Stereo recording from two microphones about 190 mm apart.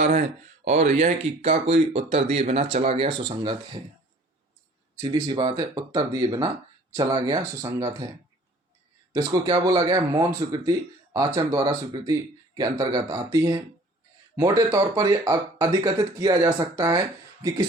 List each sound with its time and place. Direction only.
0.6 s speech: 35° right (ahead or behind)
4.9 s speech: 20° right (ahead or behind)
9.1 s speech: 25° right (ahead or behind)